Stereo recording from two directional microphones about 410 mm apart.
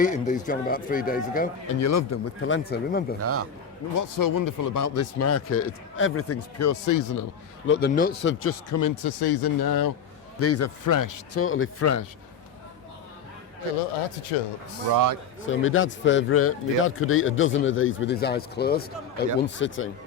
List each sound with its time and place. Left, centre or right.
0.0 s speech: centre
1.8 s speech: left
3.2 s a man's voice: right
3.9 s a man's voice: left
7.7 s speech: left
8.8 s a man's voice: left
10.4 s speech: left
10.8 s a man's voice: left
11.3 s speech: left
14.9 s speech: right
15.4 s speech: left